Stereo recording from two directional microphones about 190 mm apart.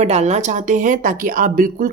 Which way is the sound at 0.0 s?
35° right (ahead or behind).